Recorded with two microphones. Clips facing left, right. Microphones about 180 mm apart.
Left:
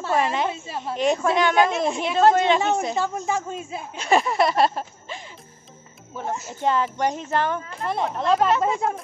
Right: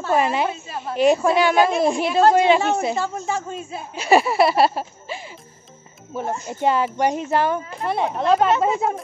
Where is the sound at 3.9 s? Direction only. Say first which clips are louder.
Right 4 dB; 10° right (ahead or behind).